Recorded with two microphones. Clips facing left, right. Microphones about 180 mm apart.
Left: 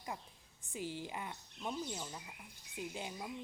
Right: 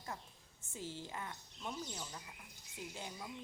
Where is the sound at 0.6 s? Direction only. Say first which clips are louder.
Left 4 dB; 15° left (ahead or behind).